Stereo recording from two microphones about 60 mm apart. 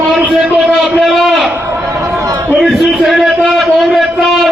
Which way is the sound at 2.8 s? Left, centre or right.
Centre.